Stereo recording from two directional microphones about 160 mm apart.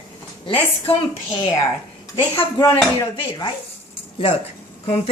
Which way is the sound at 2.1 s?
20° left (ahead or behind).